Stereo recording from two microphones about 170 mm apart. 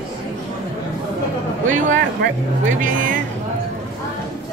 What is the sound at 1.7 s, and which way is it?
Speech, 50° right (ahead or behind).